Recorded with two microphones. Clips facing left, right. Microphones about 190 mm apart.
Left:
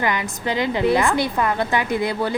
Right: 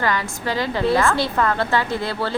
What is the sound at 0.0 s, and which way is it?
A woman's voice, 20° left (ahead or behind).